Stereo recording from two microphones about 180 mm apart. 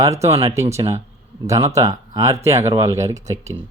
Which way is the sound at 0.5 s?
15° right (ahead or behind).